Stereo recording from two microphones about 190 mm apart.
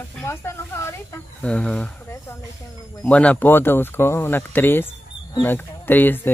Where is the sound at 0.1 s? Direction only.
10° left (ahead or behind).